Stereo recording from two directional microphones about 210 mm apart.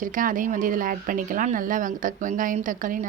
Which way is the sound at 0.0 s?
40° right (ahead or behind).